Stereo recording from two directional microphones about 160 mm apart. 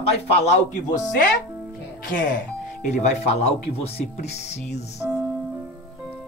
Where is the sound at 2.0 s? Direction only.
60° left (ahead or behind).